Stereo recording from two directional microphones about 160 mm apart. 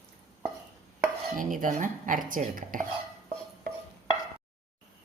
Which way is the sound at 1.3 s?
55° right (ahead or behind).